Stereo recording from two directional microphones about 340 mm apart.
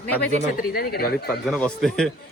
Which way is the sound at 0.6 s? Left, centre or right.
Left.